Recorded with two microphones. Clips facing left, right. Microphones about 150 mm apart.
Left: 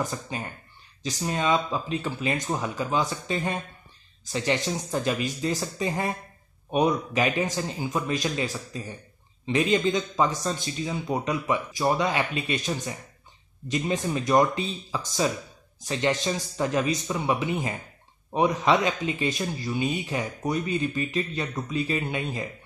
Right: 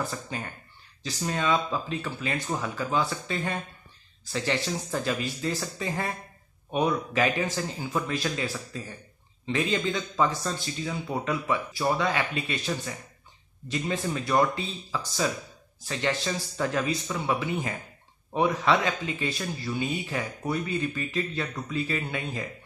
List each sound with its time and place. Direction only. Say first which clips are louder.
0.0 s speech: left 2 dB; 15° left (ahead or behind)